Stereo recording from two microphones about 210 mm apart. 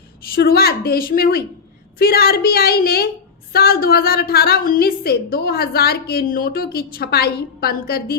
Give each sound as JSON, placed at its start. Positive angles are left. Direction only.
{"t": 0.3, "sound": "a woman's voice", "side_deg": 45}